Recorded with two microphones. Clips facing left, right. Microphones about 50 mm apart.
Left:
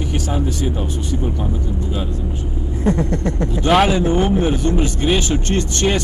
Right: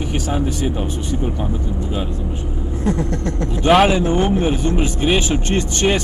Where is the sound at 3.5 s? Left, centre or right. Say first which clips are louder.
Right 2 dB; centre.